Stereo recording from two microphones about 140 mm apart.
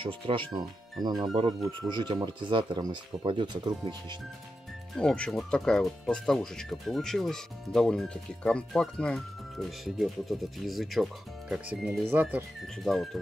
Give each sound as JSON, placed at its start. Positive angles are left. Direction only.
{"t": 0.0, "sound": "speech", "side_deg": -35}
{"t": 4.9, "sound": "speech", "side_deg": 5}
{"t": 12.8, "sound": "speech", "side_deg": 0}